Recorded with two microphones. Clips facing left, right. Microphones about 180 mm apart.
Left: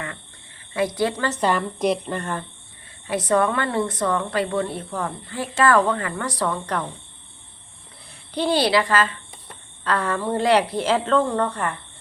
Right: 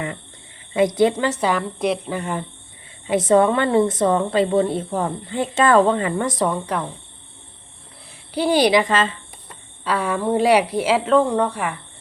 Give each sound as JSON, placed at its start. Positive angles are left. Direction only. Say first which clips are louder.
{"t": 0.7, "sound": "a woman's voice", "louder": "right 6 dB", "side_deg": -20}
{"t": 1.3, "sound": "speech", "louder": "right 1 dB", "side_deg": -5}
{"t": 3.1, "sound": "a woman's voice", "louder": "right 5 dB", "side_deg": -25}
{"t": 8.3, "sound": "speech", "louder": "right 4 dB", "side_deg": -10}
{"t": 9.8, "sound": "speech", "louder": "right 2 dB", "side_deg": -10}